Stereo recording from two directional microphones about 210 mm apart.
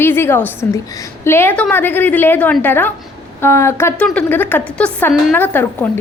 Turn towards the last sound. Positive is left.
turn(degrees=10)  # may be behind; listen again after turning